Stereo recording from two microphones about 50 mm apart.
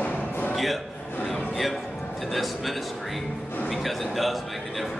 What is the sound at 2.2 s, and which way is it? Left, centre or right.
A man's voice, centre.